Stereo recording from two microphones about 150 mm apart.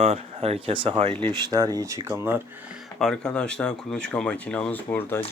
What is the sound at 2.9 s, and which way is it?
Speech, 5° left (ahead or behind).